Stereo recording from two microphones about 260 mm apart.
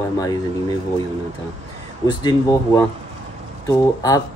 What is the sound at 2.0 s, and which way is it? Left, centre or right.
Speech, centre.